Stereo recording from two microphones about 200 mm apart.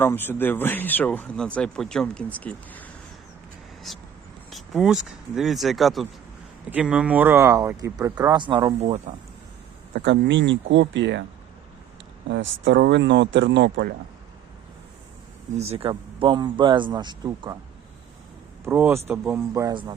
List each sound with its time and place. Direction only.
0.0 s speech: 10° left (ahead or behind); by 9.0 s 25° right (ahead or behind)
9.9 s speech: 55° right (ahead or behind)
12.3 s speech: 70° right (ahead or behind)
12.7 s speech: 55° right (ahead or behind)
15.5 s speech: 30° right (ahead or behind)
18.6 s speech: 10° right (ahead or behind)